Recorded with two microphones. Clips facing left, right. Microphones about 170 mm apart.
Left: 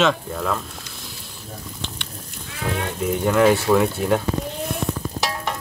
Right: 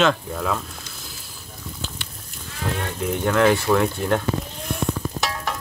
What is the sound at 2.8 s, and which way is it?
Speech, centre (ahead or behind).